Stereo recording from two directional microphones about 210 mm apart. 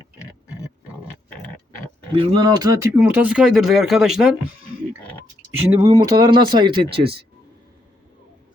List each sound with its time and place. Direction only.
2.1 s speech: 20° right (ahead or behind); by 4.3 s centre (ahead or behind)
5.7 s speech: 15° right (ahead or behind)